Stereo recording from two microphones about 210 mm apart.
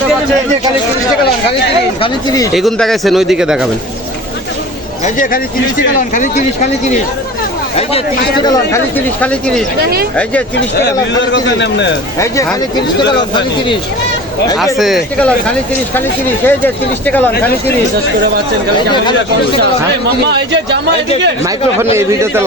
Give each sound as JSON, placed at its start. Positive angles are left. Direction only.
{"t": 2.0, "sound": "speech", "side_deg": 15}
{"t": 2.5, "sound": "speech", "side_deg": 0}
{"t": 5.0, "sound": "speech", "side_deg": 40}
{"t": 9.2, "sound": "speech", "side_deg": 5}
{"t": 11.2, "sound": "a man's voice", "side_deg": 60}
{"t": 13.0, "sound": "speech", "side_deg": 20}
{"t": 14.6, "sound": "speech", "side_deg": 0}
{"t": 20.3, "sound": "speech", "side_deg": -55}
{"t": 21.9, "sound": "speech", "side_deg": -15}